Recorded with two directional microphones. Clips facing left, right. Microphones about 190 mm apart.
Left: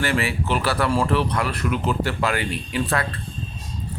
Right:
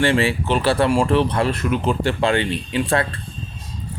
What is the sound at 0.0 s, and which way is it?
Speech, 30° right (ahead or behind).